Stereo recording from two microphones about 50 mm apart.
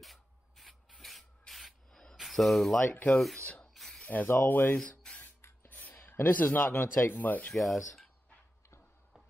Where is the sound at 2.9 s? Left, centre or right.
Left.